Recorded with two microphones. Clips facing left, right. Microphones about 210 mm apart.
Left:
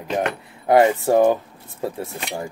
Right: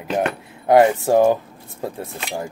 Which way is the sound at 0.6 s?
Centre (ahead or behind).